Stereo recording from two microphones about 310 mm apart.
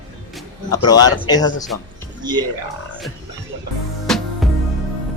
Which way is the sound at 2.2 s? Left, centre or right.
Centre.